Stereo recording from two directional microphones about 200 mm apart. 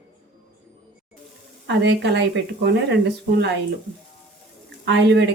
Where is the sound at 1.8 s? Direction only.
60° right (ahead or behind).